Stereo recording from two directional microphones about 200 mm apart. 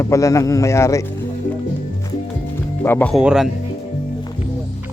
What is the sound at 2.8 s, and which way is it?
Speech, 10° left (ahead or behind).